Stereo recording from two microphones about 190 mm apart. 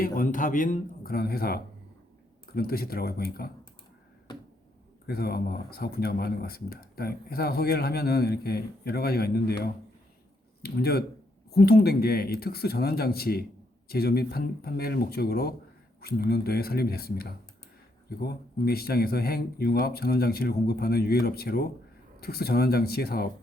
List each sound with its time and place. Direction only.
0.0 s speech: 45° left (ahead or behind)
5.0 s speech: 55° left (ahead or behind)